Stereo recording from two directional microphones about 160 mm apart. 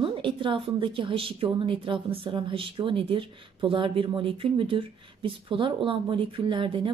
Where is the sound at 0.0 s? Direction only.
30° right (ahead or behind).